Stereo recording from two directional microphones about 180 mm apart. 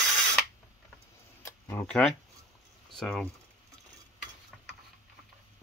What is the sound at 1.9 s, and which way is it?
Speech, 5° left (ahead or behind).